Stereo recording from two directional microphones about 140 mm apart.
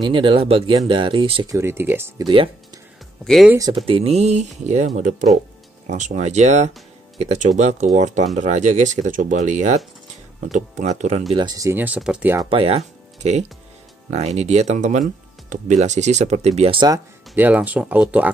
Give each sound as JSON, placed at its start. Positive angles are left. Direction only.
{"t": 0.0, "sound": "speech", "side_deg": -35}
{"t": 1.5, "sound": "speech", "side_deg": -20}
{"t": 2.2, "sound": "speech", "side_deg": -40}
{"t": 3.7, "sound": "speech", "side_deg": -40}
{"t": 11.3, "sound": "speech", "side_deg": -25}
{"t": 11.8, "sound": "speech", "side_deg": -10}
{"t": 12.4, "sound": "speech", "side_deg": -40}
{"t": 17.4, "sound": "speech", "side_deg": -10}